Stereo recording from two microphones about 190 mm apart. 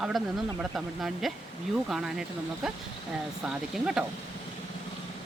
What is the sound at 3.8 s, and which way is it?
Speech, 5° right (ahead or behind).